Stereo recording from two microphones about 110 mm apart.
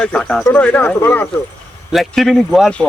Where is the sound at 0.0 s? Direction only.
10° left (ahead or behind).